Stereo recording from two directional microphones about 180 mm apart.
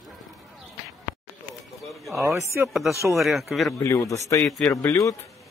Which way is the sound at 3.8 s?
15° left (ahead or behind).